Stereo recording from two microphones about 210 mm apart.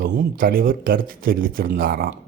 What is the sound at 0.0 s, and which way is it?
Speech, 45° right (ahead or behind).